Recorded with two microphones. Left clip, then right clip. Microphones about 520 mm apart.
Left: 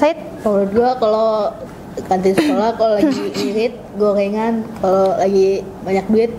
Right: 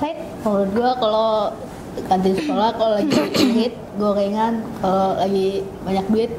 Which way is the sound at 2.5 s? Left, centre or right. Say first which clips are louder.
Left 3 dB; centre.